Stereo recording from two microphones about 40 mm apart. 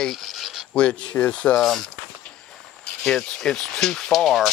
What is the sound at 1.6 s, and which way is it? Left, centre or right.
Speech, centre.